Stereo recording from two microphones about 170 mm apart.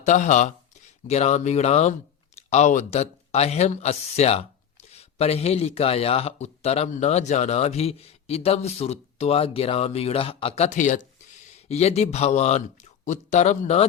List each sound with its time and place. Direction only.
0.0 s speech: 45° left (ahead or behind)